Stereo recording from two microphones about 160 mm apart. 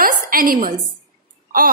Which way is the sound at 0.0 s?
60° right (ahead or behind).